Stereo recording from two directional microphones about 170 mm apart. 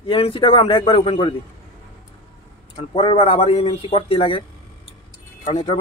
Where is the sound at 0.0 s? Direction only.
30° left (ahead or behind).